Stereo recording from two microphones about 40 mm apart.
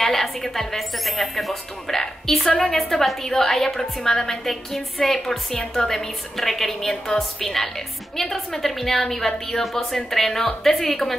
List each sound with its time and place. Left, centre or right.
0.0 s a woman's voice: centre
5.5 s a woman's voice: left
5.9 s a woman's voice: centre